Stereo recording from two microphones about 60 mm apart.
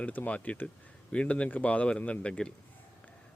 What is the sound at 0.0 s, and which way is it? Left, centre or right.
Speech, left.